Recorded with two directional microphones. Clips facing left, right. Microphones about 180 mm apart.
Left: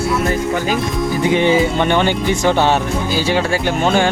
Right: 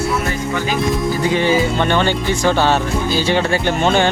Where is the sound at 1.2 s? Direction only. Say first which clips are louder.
Left 3 dB; 20° left (ahead or behind).